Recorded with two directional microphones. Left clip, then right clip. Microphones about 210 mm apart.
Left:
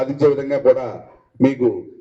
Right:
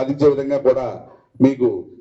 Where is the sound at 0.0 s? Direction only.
45° left (ahead or behind).